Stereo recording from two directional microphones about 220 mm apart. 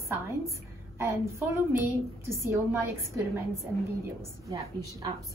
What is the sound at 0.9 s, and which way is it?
A woman's voice, 10° right (ahead or behind).